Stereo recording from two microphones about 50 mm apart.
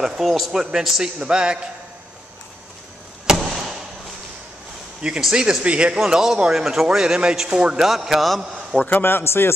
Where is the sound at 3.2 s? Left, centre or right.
Centre.